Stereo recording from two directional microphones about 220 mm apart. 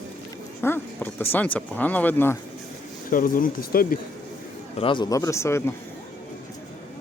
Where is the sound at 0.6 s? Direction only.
10° left (ahead or behind).